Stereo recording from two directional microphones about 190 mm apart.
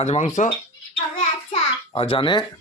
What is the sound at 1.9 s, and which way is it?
Speech, 30° left (ahead or behind).